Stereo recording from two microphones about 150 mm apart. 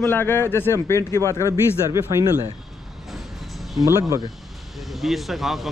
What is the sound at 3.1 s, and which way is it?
Vehicle, centre (ahead or behind).